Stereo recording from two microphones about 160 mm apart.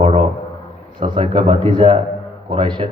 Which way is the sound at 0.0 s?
40° right (ahead or behind).